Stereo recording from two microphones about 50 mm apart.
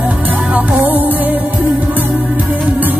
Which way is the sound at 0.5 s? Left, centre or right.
Right.